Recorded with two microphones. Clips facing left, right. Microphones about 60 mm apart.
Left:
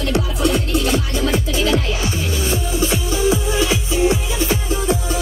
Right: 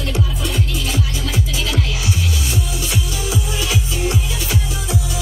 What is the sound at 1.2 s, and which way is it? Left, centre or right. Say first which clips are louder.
Music: left 5 dB; left.